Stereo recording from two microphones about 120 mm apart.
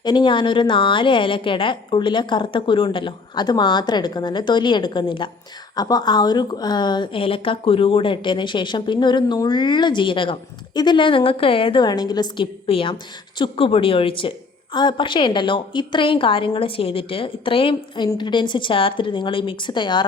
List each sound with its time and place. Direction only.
0.0 s a woman's voice: 40° left (ahead or behind)
5.7 s a woman's voice: 30° left (ahead or behind)
12.6 s a woman's voice: 45° left (ahead or behind)